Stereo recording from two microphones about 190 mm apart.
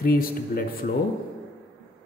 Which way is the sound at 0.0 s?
50° left (ahead or behind).